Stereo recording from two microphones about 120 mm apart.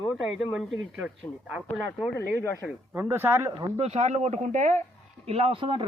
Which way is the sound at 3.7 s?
60° right (ahead or behind).